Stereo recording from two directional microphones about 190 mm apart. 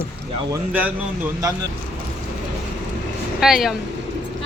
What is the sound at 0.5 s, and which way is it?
A woman's voice, 10° right (ahead or behind).